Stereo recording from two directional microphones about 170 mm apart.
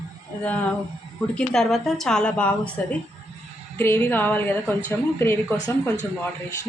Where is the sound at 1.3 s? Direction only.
5° left (ahead or behind).